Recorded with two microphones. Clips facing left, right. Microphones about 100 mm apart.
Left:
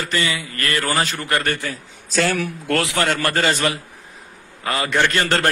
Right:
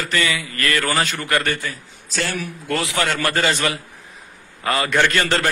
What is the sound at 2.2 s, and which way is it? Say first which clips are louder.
Speech: left 5 dB; 90° left.